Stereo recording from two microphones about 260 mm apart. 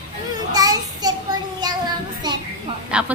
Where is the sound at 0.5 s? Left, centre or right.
Centre.